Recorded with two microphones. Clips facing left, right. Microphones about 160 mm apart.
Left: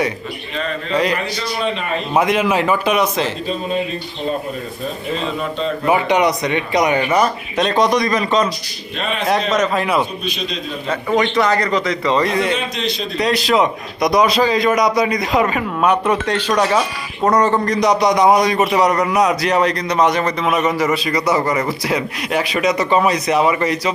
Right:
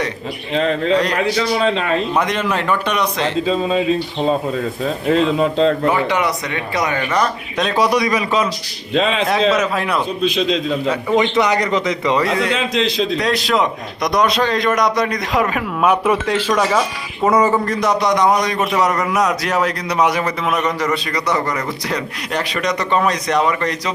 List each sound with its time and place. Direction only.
0.5 s speech: 90° right
2.1 s a man's voice: 5° left (ahead or behind)
5.1 s speech: 90° right
5.9 s speech: 20° left (ahead or behind)
7.6 s a man's voice: 5° right (ahead or behind)
11.1 s speech: 20° right (ahead or behind)
12.5 s speech: 90° right
13.1 s a man's voice: centre (ahead or behind)
20.6 s a man's voice: 5° left (ahead or behind)